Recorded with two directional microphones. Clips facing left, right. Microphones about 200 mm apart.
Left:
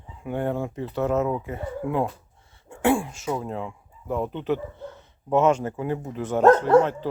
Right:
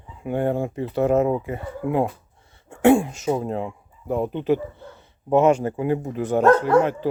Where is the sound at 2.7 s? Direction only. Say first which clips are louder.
Right 6 dB; 20° right (ahead or behind).